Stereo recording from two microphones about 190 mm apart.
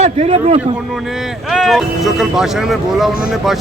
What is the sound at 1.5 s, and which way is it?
A man's voice, centre (ahead or behind).